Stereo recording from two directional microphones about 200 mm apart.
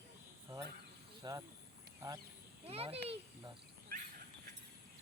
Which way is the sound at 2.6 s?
30° right (ahead or behind).